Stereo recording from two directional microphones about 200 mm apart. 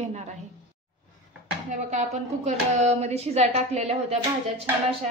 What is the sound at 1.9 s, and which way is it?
A woman's voice, 35° right (ahead or behind).